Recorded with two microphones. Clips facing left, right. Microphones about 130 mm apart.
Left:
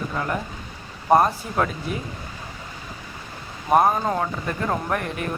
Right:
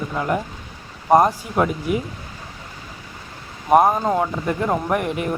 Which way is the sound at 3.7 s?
15° right (ahead or behind).